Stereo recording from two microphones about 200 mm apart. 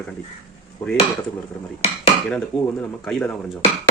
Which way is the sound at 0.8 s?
10° left (ahead or behind).